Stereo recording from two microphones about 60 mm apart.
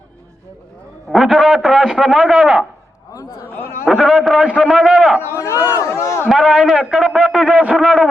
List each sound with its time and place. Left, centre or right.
1.1 s a man's voice: centre
3.1 s a man's voice: left
3.4 s a sound: left
3.8 s a man's voice: centre
4.4 s a man's voice: centre
5.3 s speech: left
6.2 s a man's voice: centre